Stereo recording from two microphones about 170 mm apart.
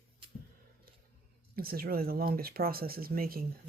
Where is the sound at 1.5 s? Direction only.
60° right (ahead or behind).